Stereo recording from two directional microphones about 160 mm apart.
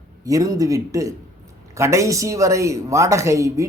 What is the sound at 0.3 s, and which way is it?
A man's voice, 20° right (ahead or behind).